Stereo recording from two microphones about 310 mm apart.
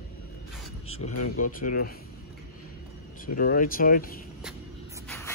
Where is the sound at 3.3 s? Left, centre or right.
Left.